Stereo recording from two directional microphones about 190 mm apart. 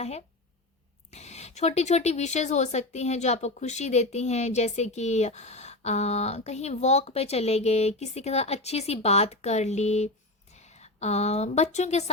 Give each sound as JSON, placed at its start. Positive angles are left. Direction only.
{"t": 0.0, "sound": "a woman's voice", "side_deg": 35}